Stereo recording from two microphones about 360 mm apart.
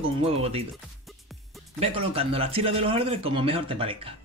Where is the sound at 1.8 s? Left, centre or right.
Centre.